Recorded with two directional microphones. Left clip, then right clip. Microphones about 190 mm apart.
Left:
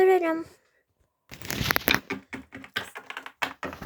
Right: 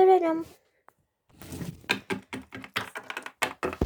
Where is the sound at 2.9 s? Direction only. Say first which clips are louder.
Right 2 dB; 60° right (ahead or behind).